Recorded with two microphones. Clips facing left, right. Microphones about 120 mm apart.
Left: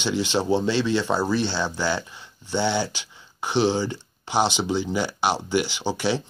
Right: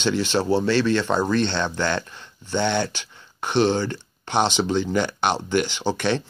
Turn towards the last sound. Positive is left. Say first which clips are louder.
# right 2 dB
turn(degrees=10)  # may be behind; listen again after turning